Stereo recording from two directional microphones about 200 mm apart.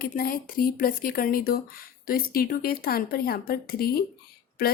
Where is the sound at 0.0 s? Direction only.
45° left (ahead or behind).